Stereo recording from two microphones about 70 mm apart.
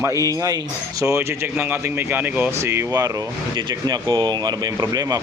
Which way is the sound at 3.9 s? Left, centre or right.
Right.